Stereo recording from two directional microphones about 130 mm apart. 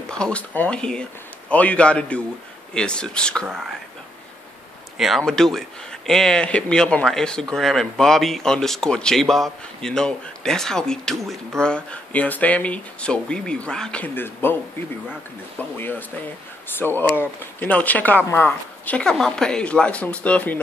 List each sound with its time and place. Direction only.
0.1 s speech: 10° left (ahead or behind)
4.9 s speech: centre (ahead or behind); by 14.6 s 15° left (ahead or behind)
16.6 s speech: 15° left (ahead or behind)